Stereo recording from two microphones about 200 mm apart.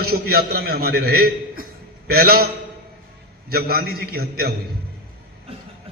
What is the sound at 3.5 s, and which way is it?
A man's voice, 50° right (ahead or behind).